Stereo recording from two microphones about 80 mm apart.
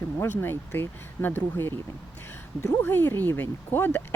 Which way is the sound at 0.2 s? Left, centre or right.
Left.